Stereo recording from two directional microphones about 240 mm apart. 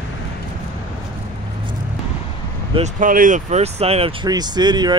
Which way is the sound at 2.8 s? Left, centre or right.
Right.